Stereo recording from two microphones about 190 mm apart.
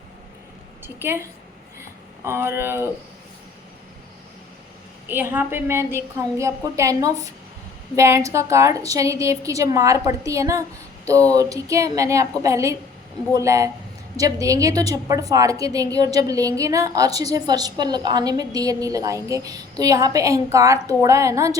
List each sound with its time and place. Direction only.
1.0 s a woman's voice: 10° right (ahead or behind)
2.2 s a woman's voice: 15° right (ahead or behind)
5.0 s a woman's voice: 10° right (ahead or behind)